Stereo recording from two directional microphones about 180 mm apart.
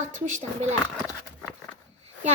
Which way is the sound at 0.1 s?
40° right (ahead or behind).